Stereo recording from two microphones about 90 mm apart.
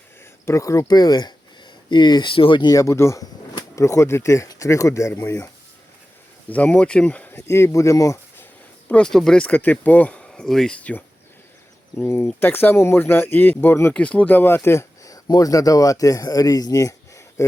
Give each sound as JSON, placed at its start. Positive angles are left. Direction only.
{"t": 0.4, "sound": "speech", "side_deg": 35}
{"t": 0.9, "sound": "speech", "side_deg": 50}
{"t": 2.7, "sound": "speech", "side_deg": 35}
{"t": 5.1, "sound": "speech", "side_deg": 20}
{"t": 6.5, "sound": "speech", "side_deg": 15}
{"t": 8.9, "sound": "speech", "side_deg": 10}
{"t": 11.9, "sound": "speech", "side_deg": 30}
{"t": 13.9, "sound": "speech", "side_deg": 15}